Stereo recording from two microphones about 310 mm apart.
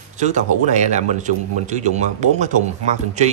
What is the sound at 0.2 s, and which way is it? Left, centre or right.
Speech, right.